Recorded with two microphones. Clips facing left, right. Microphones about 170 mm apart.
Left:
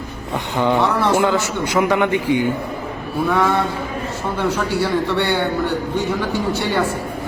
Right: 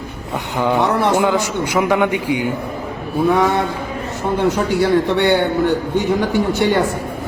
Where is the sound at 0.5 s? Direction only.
10° right (ahead or behind).